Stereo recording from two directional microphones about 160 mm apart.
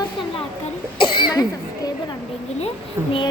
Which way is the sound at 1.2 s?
30° left (ahead or behind).